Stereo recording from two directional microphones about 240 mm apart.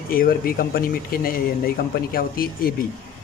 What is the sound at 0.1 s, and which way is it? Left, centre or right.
Speech, left.